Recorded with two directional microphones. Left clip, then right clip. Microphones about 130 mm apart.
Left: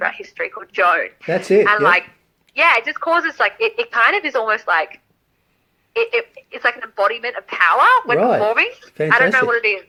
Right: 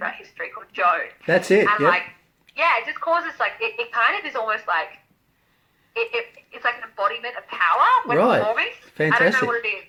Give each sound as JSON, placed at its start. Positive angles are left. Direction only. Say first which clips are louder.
{"t": 0.0, "sound": "speech", "louder": "left 7 dB", "side_deg": 65}
{"t": 1.3, "sound": "speech", "louder": "left 2 dB", "side_deg": 25}
{"t": 2.6, "sound": "speech", "louder": "left 6 dB", "side_deg": 60}
{"t": 5.9, "sound": "speech", "louder": "left 6 dB", "side_deg": 65}